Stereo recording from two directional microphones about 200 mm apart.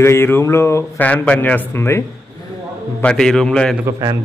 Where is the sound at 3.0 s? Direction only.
5° left (ahead or behind).